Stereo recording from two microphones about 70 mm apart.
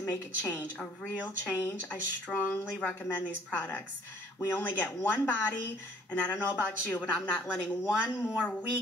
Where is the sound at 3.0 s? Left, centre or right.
Left.